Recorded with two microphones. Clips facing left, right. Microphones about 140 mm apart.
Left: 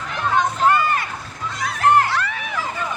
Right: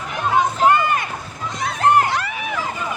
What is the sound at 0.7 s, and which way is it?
Boat, 20° right (ahead or behind).